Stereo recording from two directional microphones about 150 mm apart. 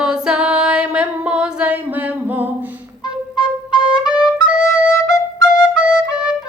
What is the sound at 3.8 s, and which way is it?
Music, 5° right (ahead or behind).